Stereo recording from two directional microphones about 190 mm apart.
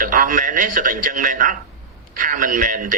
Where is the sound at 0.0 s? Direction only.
45° right (ahead or behind).